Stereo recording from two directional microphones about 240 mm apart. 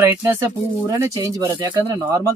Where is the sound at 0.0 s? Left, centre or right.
Centre.